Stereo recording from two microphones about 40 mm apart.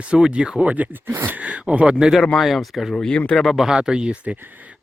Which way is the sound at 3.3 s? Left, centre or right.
Centre.